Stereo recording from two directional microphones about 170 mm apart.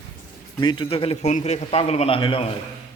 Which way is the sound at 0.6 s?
30° left (ahead or behind).